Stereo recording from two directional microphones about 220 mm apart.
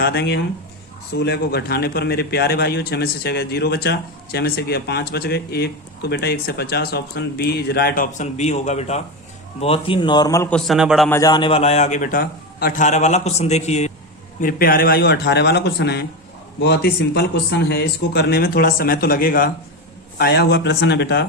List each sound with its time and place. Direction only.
0.0 s a man's voice: 50° left (ahead or behind); by 10.6 s 15° left (ahead or behind)
10.7 s a man's voice: centre (ahead or behind)
11.1 s a man's voice: 15° left (ahead or behind)
14.4 s a man's voice: 40° left (ahead or behind)